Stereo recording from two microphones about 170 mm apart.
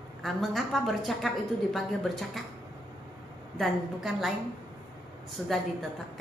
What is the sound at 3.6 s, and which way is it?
Speech, centre (ahead or behind).